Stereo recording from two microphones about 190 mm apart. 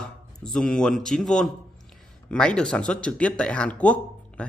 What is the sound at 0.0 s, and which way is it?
Speech, 5° left (ahead or behind).